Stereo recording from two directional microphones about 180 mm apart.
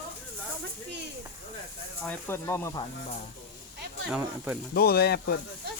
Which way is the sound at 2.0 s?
15° left (ahead or behind).